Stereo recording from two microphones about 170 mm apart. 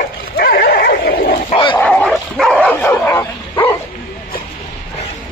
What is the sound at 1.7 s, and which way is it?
Dog, 10° left (ahead or behind).